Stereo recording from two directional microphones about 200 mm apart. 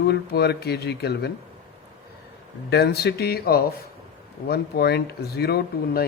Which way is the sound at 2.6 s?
55° left (ahead or behind).